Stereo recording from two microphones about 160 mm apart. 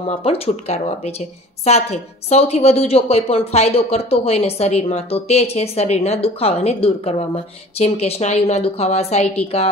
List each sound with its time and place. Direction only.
0.1 s a woman's voice: 40° left (ahead or behind)